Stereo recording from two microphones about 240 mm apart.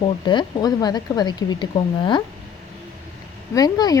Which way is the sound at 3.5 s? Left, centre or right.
Centre.